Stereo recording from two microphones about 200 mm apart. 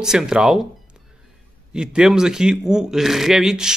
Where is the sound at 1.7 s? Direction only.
5° right (ahead or behind).